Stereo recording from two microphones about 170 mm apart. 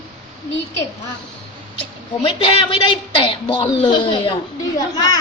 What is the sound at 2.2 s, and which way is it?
A woman's voice, 30° left (ahead or behind).